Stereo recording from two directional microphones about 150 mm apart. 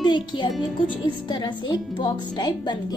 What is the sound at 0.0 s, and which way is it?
A woman's voice, 30° left (ahead or behind).